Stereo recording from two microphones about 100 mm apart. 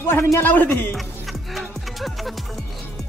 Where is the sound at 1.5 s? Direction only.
Centre (ahead or behind).